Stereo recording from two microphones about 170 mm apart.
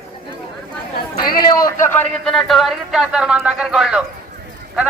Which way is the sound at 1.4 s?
20° left (ahead or behind).